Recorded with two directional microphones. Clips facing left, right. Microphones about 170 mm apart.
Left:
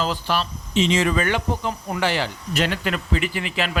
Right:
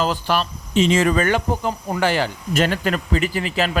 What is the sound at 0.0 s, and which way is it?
Speech, 50° right (ahead or behind).